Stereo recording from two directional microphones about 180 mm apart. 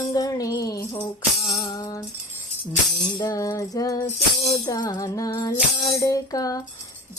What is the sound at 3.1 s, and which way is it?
Music, 20° left (ahead or behind).